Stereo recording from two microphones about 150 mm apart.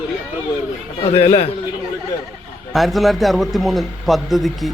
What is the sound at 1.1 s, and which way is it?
Speech, 40° left (ahead or behind).